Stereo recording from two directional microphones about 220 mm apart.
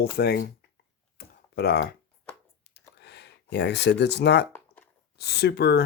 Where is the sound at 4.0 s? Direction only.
50° left (ahead or behind).